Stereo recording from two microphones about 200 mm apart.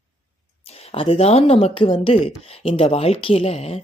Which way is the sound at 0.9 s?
25° left (ahead or behind).